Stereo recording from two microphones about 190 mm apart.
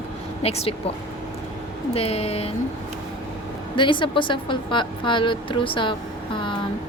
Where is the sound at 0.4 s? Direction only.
30° left (ahead or behind).